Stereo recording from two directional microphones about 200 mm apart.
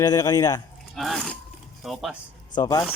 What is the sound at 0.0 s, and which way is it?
Speech, 20° left (ahead or behind).